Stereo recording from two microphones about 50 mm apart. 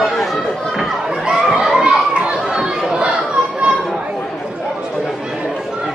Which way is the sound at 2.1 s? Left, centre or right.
Right.